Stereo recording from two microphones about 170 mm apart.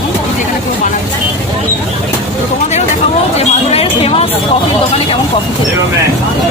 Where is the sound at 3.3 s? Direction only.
35° left (ahead or behind).